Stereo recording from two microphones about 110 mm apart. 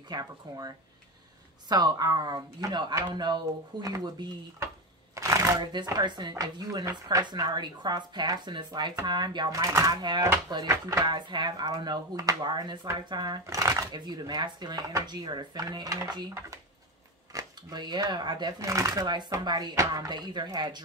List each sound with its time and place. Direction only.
0.1 s speech: 35° right (ahead or behind)
5.1 s shuffling cards: 30° right (ahead or behind)
5.6 s speech: 40° right (ahead or behind)
11.1 s speech: 45° right (ahead or behind)
13.9 s speech: 40° right (ahead or behind)
19.0 s speech: 40° right (ahead or behind)